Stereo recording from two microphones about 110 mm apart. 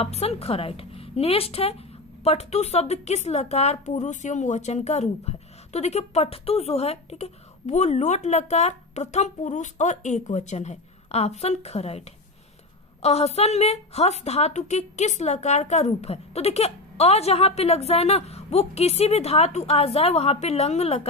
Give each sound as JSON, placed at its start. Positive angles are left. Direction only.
{"t": 0.0, "sound": "a woman's voice", "side_deg": 70}
{"t": 2.2, "sound": "a woman's voice", "side_deg": 80}